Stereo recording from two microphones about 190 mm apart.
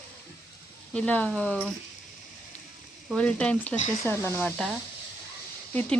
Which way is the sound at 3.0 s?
5° left (ahead or behind).